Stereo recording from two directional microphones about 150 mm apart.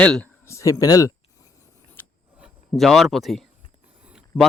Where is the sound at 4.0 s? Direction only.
5° right (ahead or behind).